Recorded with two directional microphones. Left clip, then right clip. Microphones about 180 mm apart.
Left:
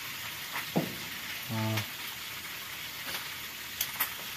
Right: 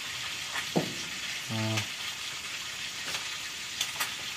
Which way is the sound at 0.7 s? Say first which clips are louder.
Right 2 dB; 65° right (ahead or behind).